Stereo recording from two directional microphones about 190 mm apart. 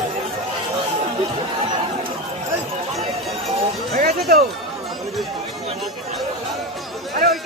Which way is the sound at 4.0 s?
50° right (ahead or behind).